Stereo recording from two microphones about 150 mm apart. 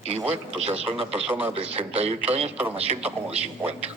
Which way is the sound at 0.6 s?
40° right (ahead or behind).